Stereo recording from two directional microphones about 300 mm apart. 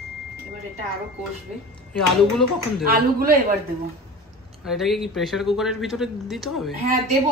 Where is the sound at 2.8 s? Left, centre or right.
Right.